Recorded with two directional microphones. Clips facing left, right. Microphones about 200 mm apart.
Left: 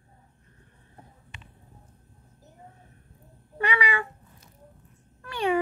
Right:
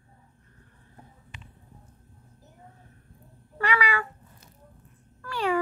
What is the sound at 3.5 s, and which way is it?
Cat, 20° left (ahead or behind).